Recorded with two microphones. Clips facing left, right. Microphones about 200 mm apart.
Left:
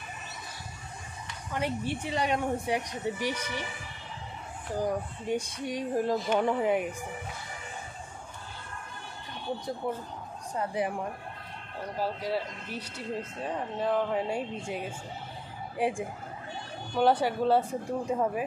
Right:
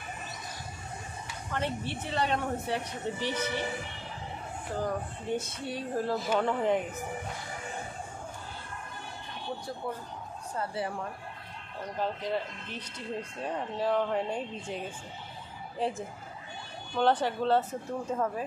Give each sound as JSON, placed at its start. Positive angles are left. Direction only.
{"t": 1.5, "sound": "a woman's voice", "side_deg": 10}
{"t": 4.7, "sound": "a woman's voice", "side_deg": 15}
{"t": 9.8, "sound": "a woman's voice", "side_deg": 20}